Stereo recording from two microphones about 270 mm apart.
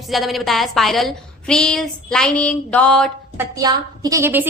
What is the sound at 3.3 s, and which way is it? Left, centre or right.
A woman's voice, centre.